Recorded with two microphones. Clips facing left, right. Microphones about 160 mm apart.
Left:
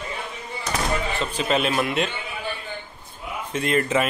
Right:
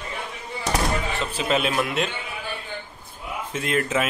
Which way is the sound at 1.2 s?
Centre (ahead or behind).